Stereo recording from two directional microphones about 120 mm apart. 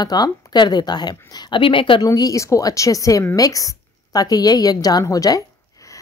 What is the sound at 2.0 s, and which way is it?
A woman's voice, 30° left (ahead or behind).